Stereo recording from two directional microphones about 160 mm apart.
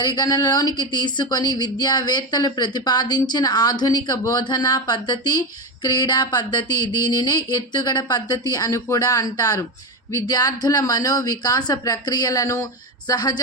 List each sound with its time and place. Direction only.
0.0 s speech: 25° left (ahead or behind)